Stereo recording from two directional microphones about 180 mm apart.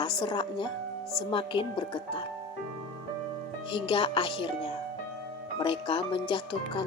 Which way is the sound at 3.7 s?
25° left (ahead or behind).